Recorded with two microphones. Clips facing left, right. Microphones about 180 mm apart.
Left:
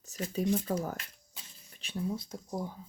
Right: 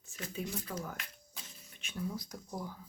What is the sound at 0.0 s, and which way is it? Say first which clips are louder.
Speech: left 8 dB; 40° left (ahead or behind).